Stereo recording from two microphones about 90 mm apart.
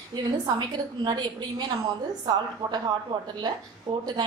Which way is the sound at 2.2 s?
50° right (ahead or behind).